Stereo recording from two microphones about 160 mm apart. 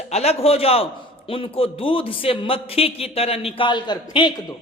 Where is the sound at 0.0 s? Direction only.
40° left (ahead or behind).